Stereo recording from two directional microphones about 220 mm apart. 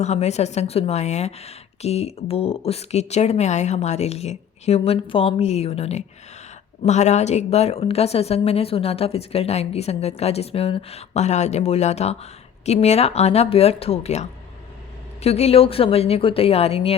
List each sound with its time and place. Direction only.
0.0 s speech: 30° left (ahead or behind)